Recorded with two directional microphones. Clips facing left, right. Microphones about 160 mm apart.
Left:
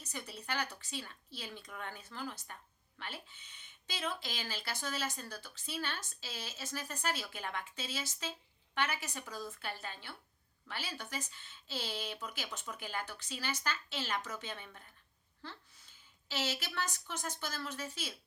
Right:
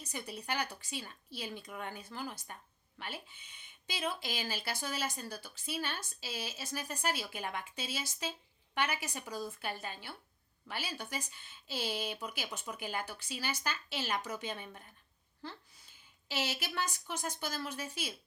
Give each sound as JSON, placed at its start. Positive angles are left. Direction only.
{"t": 0.0, "sound": "speech", "side_deg": -10}